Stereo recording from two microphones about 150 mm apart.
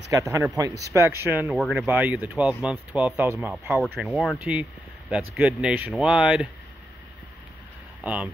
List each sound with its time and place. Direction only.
0.1 s speech: 20° right (ahead or behind)
1.6 s speech: centre (ahead or behind)
3.8 s speech: centre (ahead or behind)
4.4 s speech: 10° right (ahead or behind)
8.0 s speech: 10° right (ahead or behind)